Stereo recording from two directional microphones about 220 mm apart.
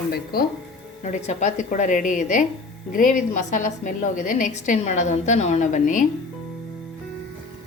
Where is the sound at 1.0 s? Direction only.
30° left (ahead or behind).